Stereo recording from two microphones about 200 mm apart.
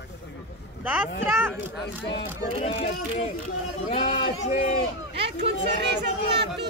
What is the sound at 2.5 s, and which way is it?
Speech, 30° left (ahead or behind).